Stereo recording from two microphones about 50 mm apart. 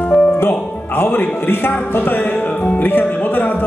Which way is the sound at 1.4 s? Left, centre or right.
Left.